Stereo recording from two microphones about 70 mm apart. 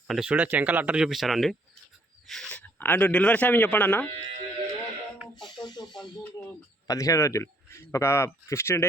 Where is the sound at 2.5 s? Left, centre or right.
Left.